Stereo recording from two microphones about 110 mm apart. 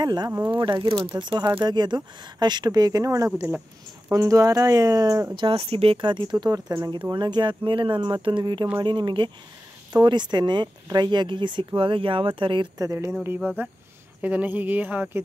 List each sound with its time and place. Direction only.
0.0 s speech: 40° right (ahead or behind)
5.3 s speech: 55° right (ahead or behind); by 7.0 s 30° right (ahead or behind)
7.1 s speech: 45° right (ahead or behind)
12.7 s speech: 30° right (ahead or behind)
13.6 s speech: 20° right (ahead or behind)